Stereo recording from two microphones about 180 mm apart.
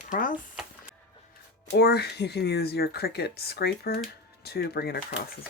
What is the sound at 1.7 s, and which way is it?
Speech, 65° left (ahead or behind).